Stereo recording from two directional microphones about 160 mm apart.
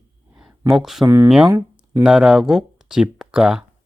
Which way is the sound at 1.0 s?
15° right (ahead or behind).